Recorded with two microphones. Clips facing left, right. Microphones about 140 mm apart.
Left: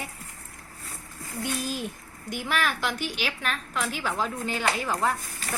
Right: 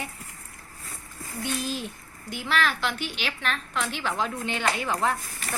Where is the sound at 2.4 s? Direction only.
10° left (ahead or behind).